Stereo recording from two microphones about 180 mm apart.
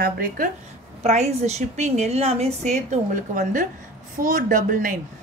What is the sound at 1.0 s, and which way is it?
A woman's voice, 35° right (ahead or behind).